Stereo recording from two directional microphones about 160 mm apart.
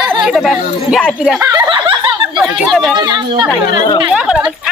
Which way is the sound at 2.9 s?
25° right (ahead or behind).